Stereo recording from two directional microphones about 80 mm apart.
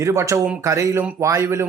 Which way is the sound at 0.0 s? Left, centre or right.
Right.